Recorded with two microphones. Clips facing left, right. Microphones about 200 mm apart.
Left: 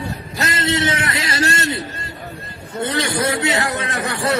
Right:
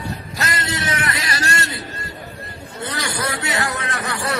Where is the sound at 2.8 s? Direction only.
25° left (ahead or behind).